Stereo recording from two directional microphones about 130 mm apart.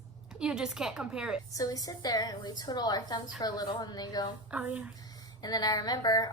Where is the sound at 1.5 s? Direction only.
30° left (ahead or behind).